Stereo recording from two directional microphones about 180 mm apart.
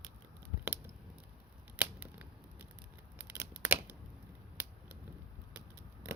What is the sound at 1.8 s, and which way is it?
Scissors, 10° right (ahead or behind).